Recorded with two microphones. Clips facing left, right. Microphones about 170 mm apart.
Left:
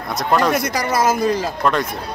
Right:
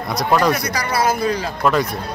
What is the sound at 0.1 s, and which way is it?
Speech, 5° left (ahead or behind).